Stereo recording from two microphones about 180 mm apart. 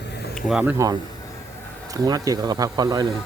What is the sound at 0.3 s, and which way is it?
Speech, 5° right (ahead or behind).